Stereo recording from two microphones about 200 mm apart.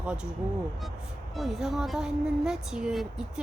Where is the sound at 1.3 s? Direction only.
Centre (ahead or behind).